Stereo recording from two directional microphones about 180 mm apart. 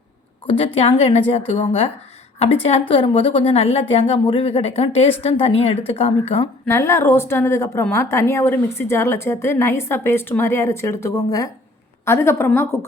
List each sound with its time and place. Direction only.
0.4 s a woman's voice: 30° left (ahead or behind)
2.9 s a woman's voice: 30° left (ahead or behind)
6.7 s a woman's voice: 15° left (ahead or behind)